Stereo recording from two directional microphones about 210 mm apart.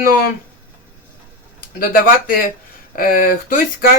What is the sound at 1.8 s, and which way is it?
Speech, 40° left (ahead or behind).